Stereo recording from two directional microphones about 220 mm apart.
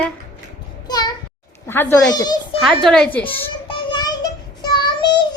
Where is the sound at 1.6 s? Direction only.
10° left (ahead or behind).